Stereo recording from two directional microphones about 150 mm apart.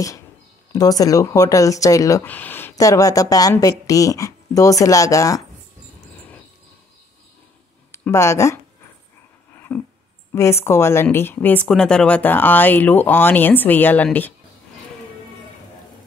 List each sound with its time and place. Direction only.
0.7 s speech: 25° left (ahead or behind)
2.2 s speech: 10° left (ahead or behind)
7.9 s speech: 20° left (ahead or behind)
9.7 s speech: 10° left (ahead or behind)